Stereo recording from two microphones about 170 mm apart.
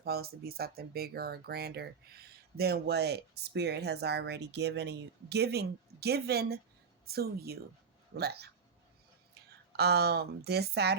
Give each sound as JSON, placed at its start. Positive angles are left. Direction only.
{"t": 0.0, "sound": "speech", "side_deg": -65}
{"t": 9.7, "sound": "speech", "side_deg": -70}